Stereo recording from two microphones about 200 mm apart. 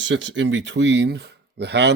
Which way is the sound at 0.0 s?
65° right (ahead or behind).